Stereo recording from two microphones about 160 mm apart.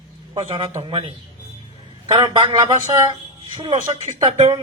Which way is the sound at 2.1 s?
30° right (ahead or behind).